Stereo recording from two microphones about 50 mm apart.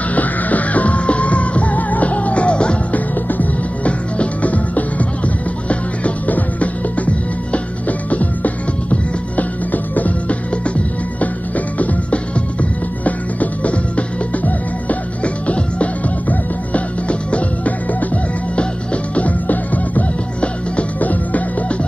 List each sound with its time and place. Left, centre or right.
0.1 s music: left
3.3 s music: left
8.1 s music: left
19.1 s music: left